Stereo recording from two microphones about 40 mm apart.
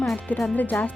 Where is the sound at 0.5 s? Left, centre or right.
Left.